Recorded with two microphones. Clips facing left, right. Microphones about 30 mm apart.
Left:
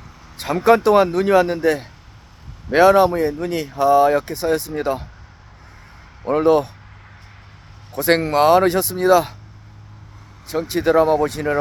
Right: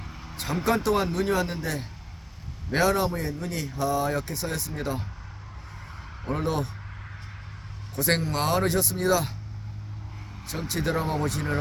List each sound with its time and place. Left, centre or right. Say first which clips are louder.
0.3 s speech: left 11 dB; left
2.6 s speech: left 11 dB; left
6.2 s speech: left 13 dB; left
7.9 s speech: left 10 dB; left
10.4 s speech: left 10 dB; left
10.9 s speech: left 15 dB; left